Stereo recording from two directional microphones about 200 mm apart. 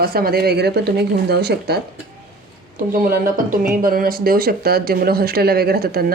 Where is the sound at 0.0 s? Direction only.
50° right (ahead or behind).